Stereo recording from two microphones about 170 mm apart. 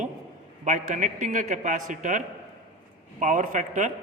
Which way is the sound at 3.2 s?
45° right (ahead or behind).